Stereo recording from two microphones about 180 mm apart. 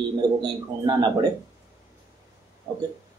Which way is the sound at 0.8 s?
25° right (ahead or behind).